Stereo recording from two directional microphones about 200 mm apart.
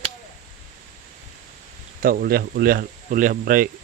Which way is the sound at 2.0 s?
45° right (ahead or behind).